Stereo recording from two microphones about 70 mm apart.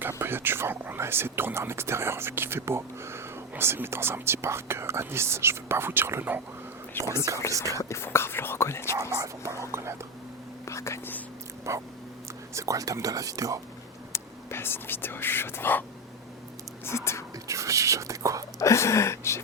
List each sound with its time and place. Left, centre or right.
0.1 s speech: right
7.0 s speech: left
7.7 s speech: left
9.0 s speech: right
10.7 s speech: left
11.7 s speech: right
12.5 s speech: right
14.1 s speech: left
16.8 s speech: left
17.5 s speech: right
18.6 s speech: left